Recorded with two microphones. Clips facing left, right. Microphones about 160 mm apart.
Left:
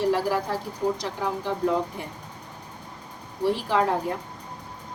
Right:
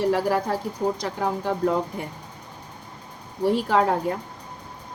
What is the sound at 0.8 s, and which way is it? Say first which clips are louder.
Speech: even; 40° right (ahead or behind).